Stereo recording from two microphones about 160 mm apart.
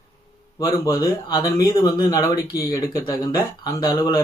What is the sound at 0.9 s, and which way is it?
Speech, 25° left (ahead or behind).